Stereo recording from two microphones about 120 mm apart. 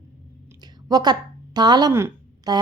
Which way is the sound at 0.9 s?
35° right (ahead or behind).